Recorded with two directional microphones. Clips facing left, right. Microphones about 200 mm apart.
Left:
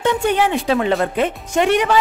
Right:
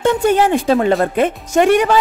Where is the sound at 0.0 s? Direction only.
45° right (ahead or behind).